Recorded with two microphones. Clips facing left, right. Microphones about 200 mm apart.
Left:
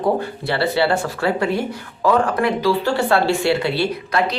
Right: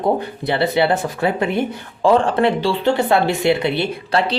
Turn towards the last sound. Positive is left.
turn(degrees=-30)  # may be behind; listen again after turning